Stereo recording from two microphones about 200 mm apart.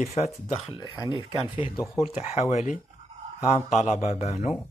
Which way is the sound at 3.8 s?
35° left (ahead or behind).